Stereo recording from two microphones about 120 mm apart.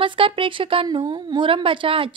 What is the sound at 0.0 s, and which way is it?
A woman's voice, 45° right (ahead or behind).